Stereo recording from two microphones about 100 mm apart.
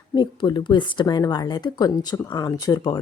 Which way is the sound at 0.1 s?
50° left (ahead or behind).